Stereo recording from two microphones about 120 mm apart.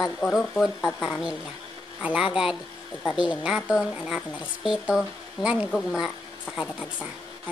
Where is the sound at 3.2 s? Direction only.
10° right (ahead or behind).